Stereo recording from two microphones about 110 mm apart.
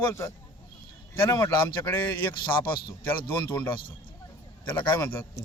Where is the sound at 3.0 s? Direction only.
15° left (ahead or behind).